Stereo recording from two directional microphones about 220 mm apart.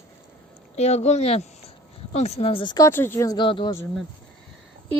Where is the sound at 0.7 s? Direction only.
30° left (ahead or behind).